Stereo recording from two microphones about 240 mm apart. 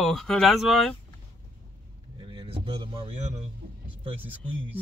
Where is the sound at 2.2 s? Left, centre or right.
Centre.